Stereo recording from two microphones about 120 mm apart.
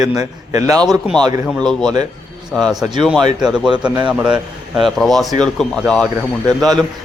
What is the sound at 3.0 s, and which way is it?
Speech, centre (ahead or behind).